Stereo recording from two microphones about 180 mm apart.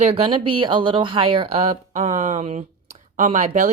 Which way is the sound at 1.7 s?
45° right (ahead or behind).